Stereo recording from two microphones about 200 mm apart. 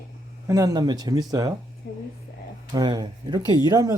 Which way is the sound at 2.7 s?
20° right (ahead or behind).